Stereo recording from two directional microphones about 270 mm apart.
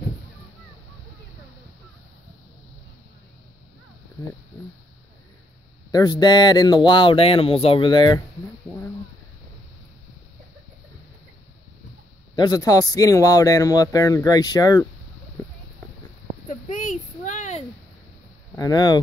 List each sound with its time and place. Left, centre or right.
5.9 s a man's voice: centre
12.4 s a man's voice: centre
16.4 s a sound: left
18.6 s a man's voice: centre